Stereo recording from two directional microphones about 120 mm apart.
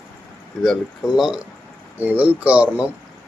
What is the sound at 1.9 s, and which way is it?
Speech, 15° right (ahead or behind).